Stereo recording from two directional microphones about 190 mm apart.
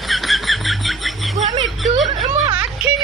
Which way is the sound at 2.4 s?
10° right (ahead or behind).